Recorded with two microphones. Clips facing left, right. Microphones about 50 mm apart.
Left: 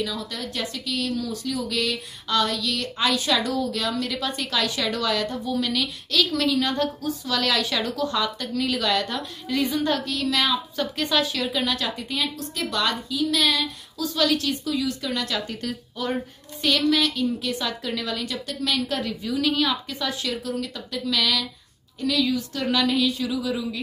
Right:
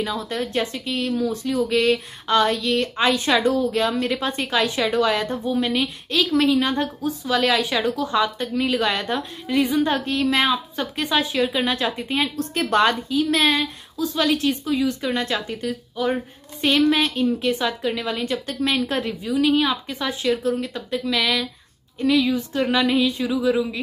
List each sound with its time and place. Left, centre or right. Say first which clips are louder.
0.0 s a woman's voice: right 4 dB; right
15.4 s a woman's voice: right 4 dB; centre
16.6 s a woman's voice: right 3 dB; right
19.2 s a woman's voice: right 4 dB; centre